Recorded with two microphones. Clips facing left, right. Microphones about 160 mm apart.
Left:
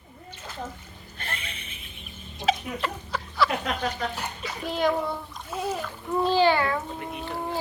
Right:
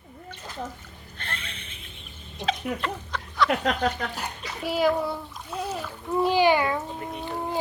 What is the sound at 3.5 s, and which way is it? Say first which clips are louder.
Speech: right 4 dB; 60° right (ahead or behind).